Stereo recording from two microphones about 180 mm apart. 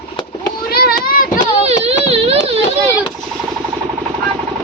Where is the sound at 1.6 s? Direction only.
35° right (ahead or behind).